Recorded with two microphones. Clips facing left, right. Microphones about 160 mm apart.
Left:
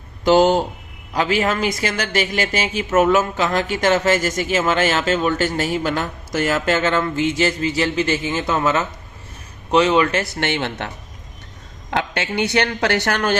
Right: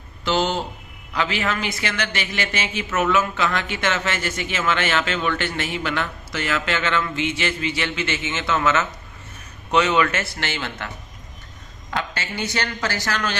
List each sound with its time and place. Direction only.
0.3 s speech: 45° left (ahead or behind)
10.4 s a woman's voice: 60° left (ahead or behind)